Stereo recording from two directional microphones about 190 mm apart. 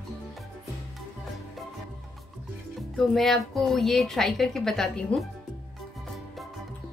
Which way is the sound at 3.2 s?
Centre (ahead or behind).